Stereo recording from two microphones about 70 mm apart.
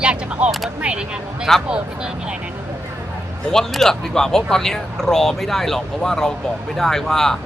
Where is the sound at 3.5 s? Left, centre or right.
Centre.